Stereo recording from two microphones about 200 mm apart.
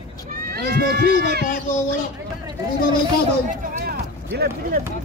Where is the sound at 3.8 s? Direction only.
50° right (ahead or behind).